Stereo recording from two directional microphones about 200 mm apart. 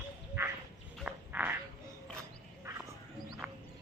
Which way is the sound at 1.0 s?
5° right (ahead or behind).